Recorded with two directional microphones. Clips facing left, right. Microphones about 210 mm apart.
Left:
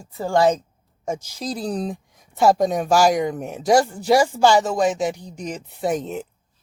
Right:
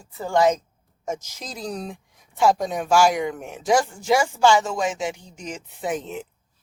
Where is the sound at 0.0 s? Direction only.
35° left (ahead or behind).